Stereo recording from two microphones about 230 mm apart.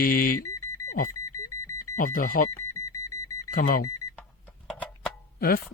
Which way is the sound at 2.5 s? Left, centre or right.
Centre.